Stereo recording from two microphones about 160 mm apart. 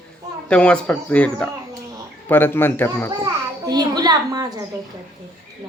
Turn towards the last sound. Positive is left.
turn(degrees=-25)  # may be behind; listen again after turning